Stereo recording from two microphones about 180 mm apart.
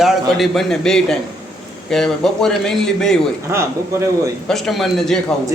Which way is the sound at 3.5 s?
15° right (ahead or behind).